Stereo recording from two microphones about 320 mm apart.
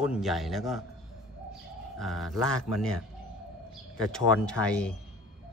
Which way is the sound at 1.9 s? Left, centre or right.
Centre.